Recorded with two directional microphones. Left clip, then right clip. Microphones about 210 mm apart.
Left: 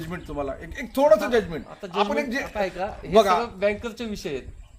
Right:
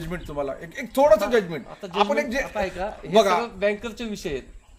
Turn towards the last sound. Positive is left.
turn(degrees=15)  # may be behind; listen again after turning